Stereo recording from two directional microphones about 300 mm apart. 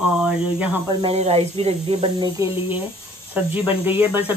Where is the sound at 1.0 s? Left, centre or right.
Centre.